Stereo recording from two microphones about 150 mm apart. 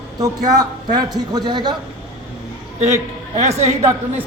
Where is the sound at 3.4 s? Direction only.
45° right (ahead or behind).